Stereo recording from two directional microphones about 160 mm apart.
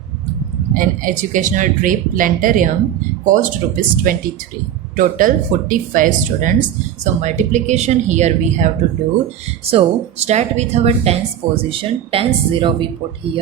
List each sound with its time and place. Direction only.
0.7 s a woman's voice: 60° right (ahead or behind); by 12.9 s 30° right (ahead or behind)